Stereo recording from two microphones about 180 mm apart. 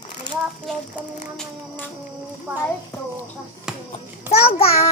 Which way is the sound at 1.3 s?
10° left (ahead or behind).